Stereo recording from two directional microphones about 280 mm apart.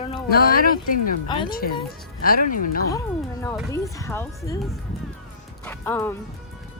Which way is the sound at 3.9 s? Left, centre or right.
Centre.